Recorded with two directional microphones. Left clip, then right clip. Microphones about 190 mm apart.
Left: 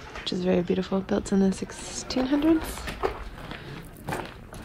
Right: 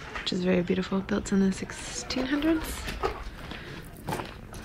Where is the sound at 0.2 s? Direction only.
10° left (ahead or behind).